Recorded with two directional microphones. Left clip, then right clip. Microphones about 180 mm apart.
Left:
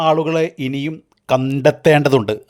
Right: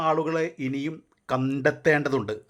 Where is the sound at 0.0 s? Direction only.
35° left (ahead or behind).